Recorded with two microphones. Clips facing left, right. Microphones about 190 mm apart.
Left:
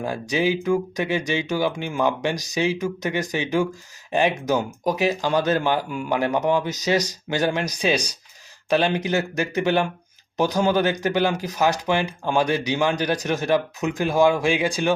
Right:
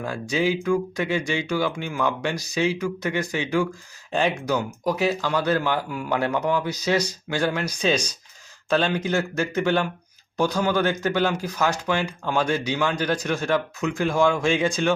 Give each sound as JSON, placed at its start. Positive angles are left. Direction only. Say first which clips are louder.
{"t": 0.0, "sound": "speech", "louder": "left 1 dB", "side_deg": 15}